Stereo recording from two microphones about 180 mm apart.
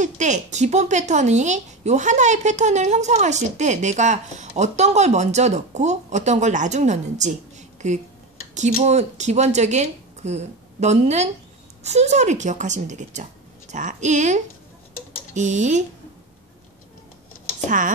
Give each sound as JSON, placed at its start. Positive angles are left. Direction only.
{"t": 0.0, "sound": "a woman's voice", "side_deg": -40}
{"t": 17.6, "sound": "speech", "side_deg": -45}